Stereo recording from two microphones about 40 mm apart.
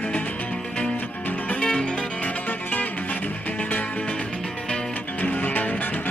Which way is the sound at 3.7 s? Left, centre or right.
Left.